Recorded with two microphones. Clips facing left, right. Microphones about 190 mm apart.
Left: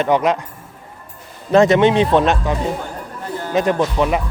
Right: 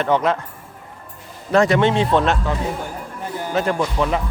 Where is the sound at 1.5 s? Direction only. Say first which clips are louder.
Left 4 dB; 20° left (ahead or behind).